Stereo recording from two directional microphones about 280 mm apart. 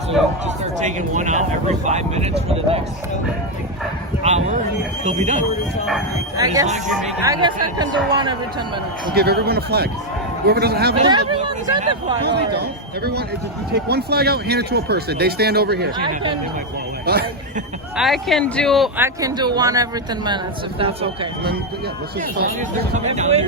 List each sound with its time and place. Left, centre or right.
0.6 s speech: right
4.2 s speech: right
6.3 s speech: centre
6.8 s speech: centre
9.1 s speech: right
10.9 s speech: right
12.5 s speech: right
17.1 s speech: right
17.9 s a man's voice: centre
23.0 s speech: right